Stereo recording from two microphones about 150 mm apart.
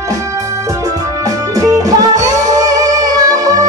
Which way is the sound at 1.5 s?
25° right (ahead or behind).